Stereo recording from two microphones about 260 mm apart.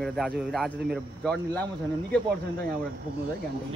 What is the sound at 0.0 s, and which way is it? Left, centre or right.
Speech, centre.